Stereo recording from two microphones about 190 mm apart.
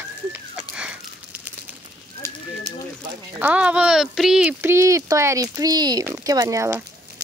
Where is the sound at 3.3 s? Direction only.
10° right (ahead or behind).